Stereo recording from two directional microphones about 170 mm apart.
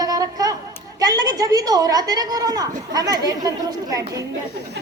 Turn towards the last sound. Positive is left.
turn(degrees=-20)  # may be behind; listen again after turning